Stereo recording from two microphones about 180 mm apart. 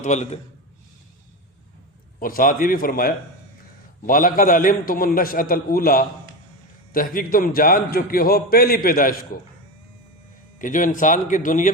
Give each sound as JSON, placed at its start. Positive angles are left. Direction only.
{"t": 0.0, "sound": "a man's voice", "side_deg": 40}
{"t": 2.1, "sound": "a man's voice", "side_deg": 50}
{"t": 10.6, "sound": "a man's voice", "side_deg": 45}